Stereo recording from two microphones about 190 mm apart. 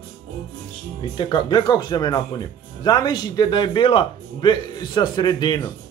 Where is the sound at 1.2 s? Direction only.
20° left (ahead or behind).